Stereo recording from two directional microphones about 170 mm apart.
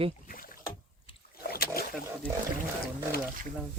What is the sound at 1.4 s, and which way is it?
Boat, 65° left (ahead or behind).